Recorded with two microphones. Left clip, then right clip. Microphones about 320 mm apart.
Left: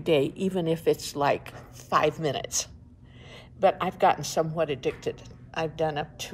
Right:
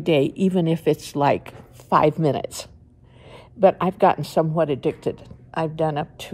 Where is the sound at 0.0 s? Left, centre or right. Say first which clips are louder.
Right 5 dB; centre.